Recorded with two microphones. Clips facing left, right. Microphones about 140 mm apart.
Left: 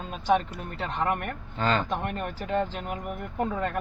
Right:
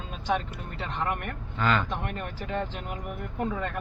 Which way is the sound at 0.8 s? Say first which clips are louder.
Left 3 dB; 45° left (ahead or behind).